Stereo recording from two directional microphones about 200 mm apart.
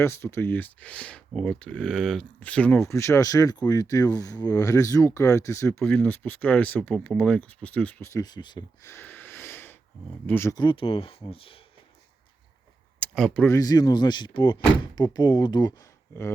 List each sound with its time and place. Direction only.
0.0 s speech: 15° left (ahead or behind)
13.0 s speech: 5° left (ahead or behind)
13.5 s speech: 20° left (ahead or behind)